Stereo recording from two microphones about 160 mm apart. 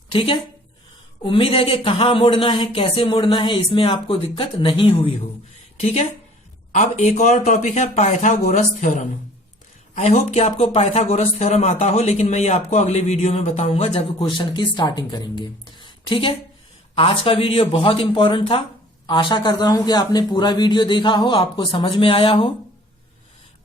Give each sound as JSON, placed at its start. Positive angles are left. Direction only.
{"t": 0.1, "sound": "speech", "side_deg": 35}
{"t": 6.7, "sound": "a man's voice", "side_deg": 45}